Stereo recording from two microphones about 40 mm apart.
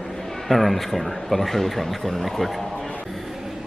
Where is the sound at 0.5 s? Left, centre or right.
Centre.